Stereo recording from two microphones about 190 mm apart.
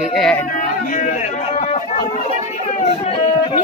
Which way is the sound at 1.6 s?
35° left (ahead or behind).